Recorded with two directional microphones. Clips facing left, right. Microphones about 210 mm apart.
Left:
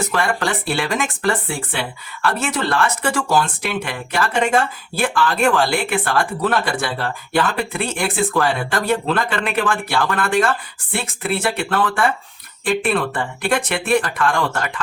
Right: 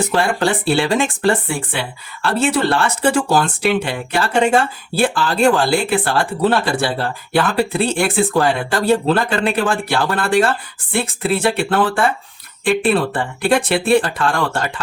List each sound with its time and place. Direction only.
0.1 s speech: 30° right (ahead or behind)